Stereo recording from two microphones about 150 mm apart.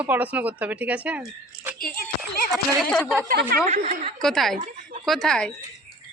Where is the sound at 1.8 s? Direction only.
80° left.